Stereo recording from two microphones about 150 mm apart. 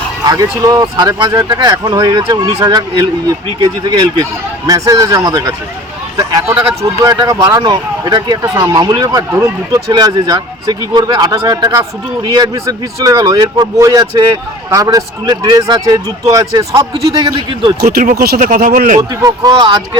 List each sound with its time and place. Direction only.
0.3 s speech: 25° right (ahead or behind)
17.8 s speech: 65° right (ahead or behind)
19.2 s speech: 25° right (ahead or behind)